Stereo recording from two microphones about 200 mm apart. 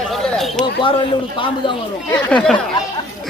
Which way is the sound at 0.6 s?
25° left (ahead or behind).